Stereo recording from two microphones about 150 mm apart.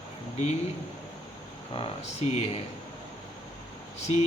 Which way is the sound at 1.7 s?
40° left (ahead or behind).